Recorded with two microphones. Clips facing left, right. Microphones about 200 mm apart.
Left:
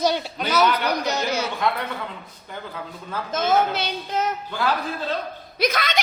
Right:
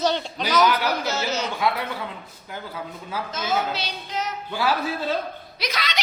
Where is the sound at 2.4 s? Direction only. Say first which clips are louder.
Even; 5° right (ahead or behind).